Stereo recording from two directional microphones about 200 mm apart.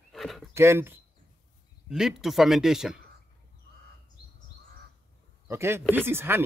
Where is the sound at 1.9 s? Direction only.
Centre (ahead or behind).